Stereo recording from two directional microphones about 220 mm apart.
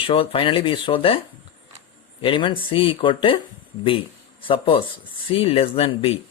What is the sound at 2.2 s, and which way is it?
Speech, 20° left (ahead or behind).